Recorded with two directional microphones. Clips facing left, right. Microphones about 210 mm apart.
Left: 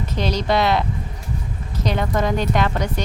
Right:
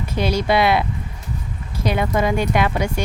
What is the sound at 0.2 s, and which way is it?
Speech, 10° right (ahead or behind).